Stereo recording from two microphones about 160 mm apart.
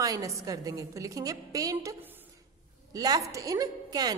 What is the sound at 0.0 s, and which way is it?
A woman's voice, 20° right (ahead or behind).